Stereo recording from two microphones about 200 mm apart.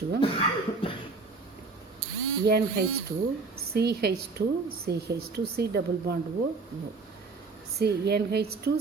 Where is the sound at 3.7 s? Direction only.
55° right (ahead or behind).